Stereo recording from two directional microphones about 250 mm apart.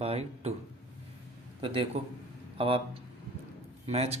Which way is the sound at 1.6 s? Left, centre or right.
Centre.